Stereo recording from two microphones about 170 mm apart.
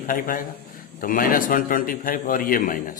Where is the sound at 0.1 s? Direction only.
55° left (ahead or behind).